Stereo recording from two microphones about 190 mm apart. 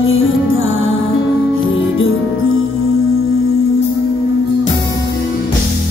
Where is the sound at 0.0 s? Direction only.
90° left.